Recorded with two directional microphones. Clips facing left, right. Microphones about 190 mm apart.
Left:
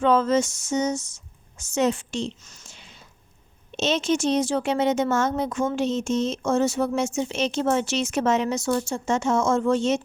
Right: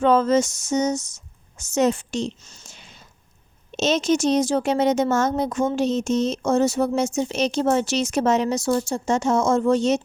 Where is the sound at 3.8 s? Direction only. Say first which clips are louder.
Right 3 dB; 40° right (ahead or behind).